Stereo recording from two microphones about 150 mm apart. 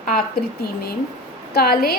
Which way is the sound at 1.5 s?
90° left.